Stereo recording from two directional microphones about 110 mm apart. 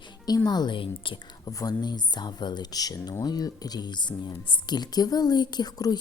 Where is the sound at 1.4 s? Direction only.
35° left (ahead or behind).